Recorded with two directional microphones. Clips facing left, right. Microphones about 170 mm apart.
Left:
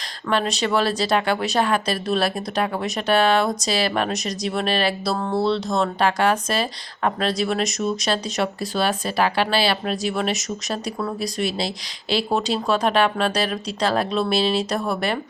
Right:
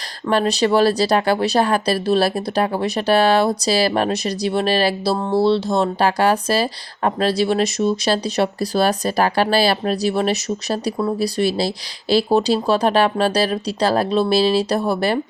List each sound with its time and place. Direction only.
0.3 s speech: 35° right (ahead or behind)